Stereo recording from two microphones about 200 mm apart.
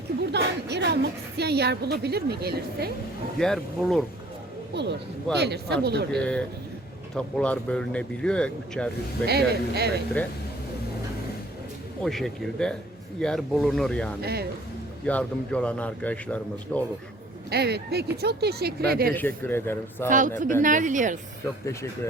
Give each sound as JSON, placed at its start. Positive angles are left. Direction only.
{"t": 0.3, "sound": "speech", "side_deg": -60}
{"t": 3.3, "sound": "speech", "side_deg": 5}
{"t": 4.7, "sound": "a man's voice", "side_deg": -60}
{"t": 7.2, "sound": "speech", "side_deg": 5}
{"t": 9.2, "sound": "speech", "side_deg": -55}
{"t": 12.0, "sound": "speech", "side_deg": 0}
{"t": 14.2, "sound": "speech", "side_deg": -50}
{"t": 15.0, "sound": "a man's voice", "side_deg": 5}
{"t": 17.5, "sound": "speech", "side_deg": -55}
{"t": 19.1, "sound": "a man's voice", "side_deg": 10}
{"t": 20.1, "sound": "a woman's voice", "side_deg": -40}